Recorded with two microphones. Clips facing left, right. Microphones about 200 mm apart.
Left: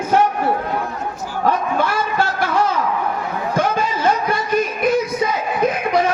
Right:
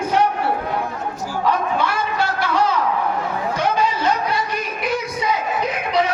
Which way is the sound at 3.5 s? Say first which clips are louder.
Left 2 dB; 50° left (ahead or behind).